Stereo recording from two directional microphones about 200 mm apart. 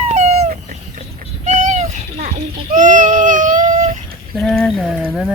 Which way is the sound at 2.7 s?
40° right (ahead or behind).